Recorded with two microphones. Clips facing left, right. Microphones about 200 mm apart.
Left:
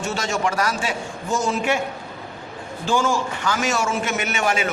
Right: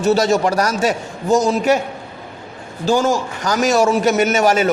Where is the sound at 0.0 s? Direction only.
35° right (ahead or behind).